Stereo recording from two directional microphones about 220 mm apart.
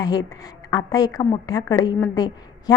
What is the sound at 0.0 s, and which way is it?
A woman's voice, 15° left (ahead or behind).